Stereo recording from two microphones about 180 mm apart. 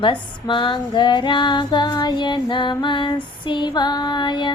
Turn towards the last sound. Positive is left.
turn(degrees=25)  # may be behind; listen again after turning